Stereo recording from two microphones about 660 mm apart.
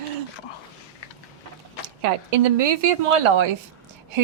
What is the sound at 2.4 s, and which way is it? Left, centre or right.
A woman's voice, right.